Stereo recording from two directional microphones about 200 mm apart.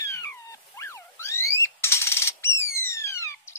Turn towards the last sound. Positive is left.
turn(degrees=15)  # may be behind; listen again after turning